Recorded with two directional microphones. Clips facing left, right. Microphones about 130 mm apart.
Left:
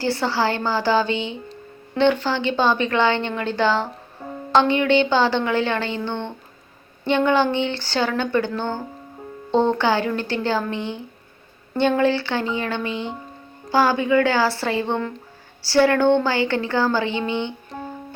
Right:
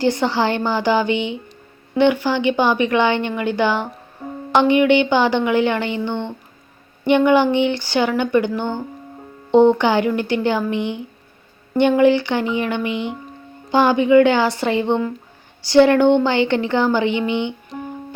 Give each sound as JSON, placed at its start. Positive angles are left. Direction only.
{"t": 0.0, "sound": "a woman's voice", "side_deg": -20}